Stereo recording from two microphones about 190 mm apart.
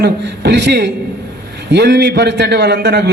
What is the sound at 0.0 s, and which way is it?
A man's voice, 60° right (ahead or behind).